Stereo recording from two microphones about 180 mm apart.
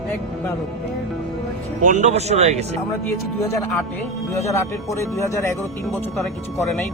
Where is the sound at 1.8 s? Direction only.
40° right (ahead or behind).